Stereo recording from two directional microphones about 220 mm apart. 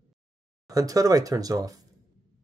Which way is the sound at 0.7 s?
15° right (ahead or behind).